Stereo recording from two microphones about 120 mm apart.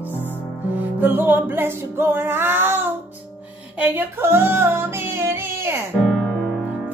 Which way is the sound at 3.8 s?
20° right (ahead or behind).